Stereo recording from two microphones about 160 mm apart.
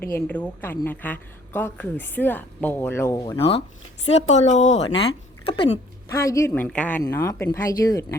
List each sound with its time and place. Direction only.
0.1 s a woman's voice: 10° left (ahead or behind)
3.3 s a woman's voice: 35° left (ahead or behind)
6.1 s a woman's voice: 20° left (ahead or behind)